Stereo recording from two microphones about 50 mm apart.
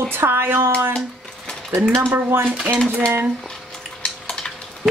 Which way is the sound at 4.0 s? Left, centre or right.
Centre.